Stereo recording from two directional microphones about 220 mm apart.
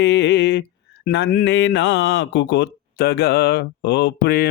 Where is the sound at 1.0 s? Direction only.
50° left (ahead or behind).